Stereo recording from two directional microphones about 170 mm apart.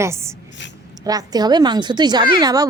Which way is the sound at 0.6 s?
90° left.